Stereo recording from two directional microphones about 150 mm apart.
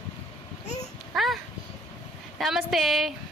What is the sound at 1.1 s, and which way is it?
Speech, centre (ahead or behind).